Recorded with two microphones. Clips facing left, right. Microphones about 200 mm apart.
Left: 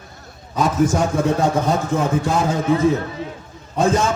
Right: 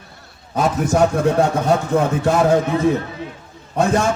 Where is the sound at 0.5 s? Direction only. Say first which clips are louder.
Even; 65° right (ahead or behind).